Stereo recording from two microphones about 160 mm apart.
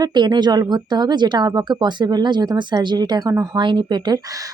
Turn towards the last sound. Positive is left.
turn(degrees=-30)  # may be behind; listen again after turning